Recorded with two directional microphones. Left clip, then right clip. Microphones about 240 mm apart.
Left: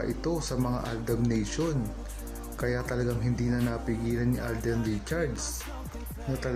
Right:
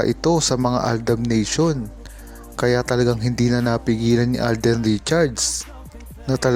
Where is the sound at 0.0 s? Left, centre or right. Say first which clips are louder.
Right 13 dB; right.